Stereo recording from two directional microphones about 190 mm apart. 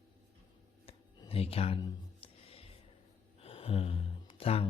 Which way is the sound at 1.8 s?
25° left (ahead or behind).